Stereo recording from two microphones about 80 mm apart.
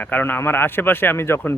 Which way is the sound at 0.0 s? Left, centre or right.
Left.